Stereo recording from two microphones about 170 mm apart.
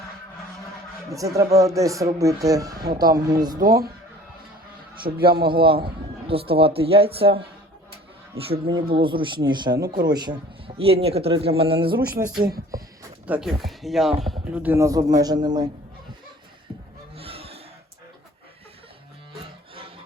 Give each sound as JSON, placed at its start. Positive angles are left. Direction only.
{"t": 1.5, "sound": "speech", "side_deg": -20}
{"t": 3.6, "sound": "a man's voice", "side_deg": -60}
{"t": 5.0, "sound": "a man's voice", "side_deg": -60}
{"t": 5.5, "sound": "a man's voice", "side_deg": -30}
{"t": 8.6, "sound": "a man's voice", "side_deg": -30}
{"t": 11.9, "sound": "a man's voice", "side_deg": -60}
{"t": 12.7, "sound": "speech", "side_deg": -20}
{"t": 13.2, "sound": "speech", "side_deg": -5}
{"t": 17.2, "sound": "a sound", "side_deg": -35}